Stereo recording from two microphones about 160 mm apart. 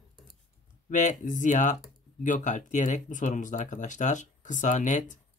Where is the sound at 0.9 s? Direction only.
50° left (ahead or behind).